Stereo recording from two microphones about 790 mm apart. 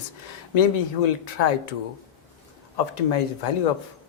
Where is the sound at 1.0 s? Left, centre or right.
Left.